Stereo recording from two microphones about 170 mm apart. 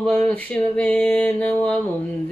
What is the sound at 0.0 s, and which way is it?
Mantra, 5° left (ahead or behind).